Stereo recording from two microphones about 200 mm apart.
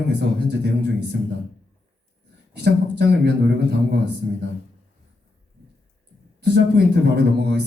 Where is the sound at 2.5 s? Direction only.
55° right (ahead or behind).